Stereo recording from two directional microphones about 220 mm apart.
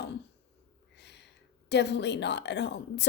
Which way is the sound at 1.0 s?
50° left (ahead or behind).